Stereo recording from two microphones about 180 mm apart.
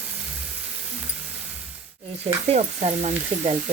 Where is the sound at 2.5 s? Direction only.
40° right (ahead or behind).